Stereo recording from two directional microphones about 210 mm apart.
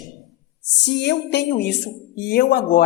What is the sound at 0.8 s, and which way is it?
A woman's voice, 55° left (ahead or behind).